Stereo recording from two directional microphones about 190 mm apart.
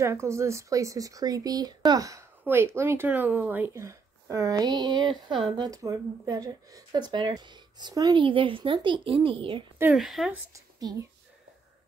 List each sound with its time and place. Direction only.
0.0 s a woman's voice: 15° right (ahead or behind)
9.8 s speech: 5° right (ahead or behind)
10.5 s speech: 20° right (ahead or behind)